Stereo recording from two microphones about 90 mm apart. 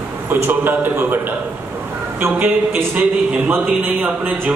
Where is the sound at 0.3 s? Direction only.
20° right (ahead or behind).